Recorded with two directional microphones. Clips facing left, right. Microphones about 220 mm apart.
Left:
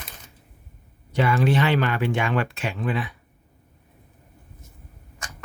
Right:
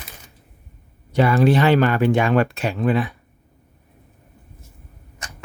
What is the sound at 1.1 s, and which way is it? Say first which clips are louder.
Speech: right 5 dB; 40° right (ahead or behind).